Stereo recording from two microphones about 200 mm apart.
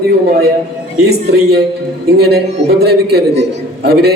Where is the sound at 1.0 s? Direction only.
55° right (ahead or behind).